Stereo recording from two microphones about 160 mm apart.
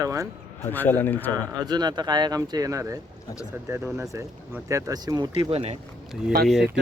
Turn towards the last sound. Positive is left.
turn(degrees=0)  # may be behind; listen again after turning